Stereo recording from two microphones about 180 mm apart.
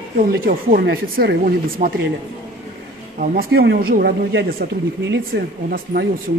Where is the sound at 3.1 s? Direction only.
60° right (ahead or behind).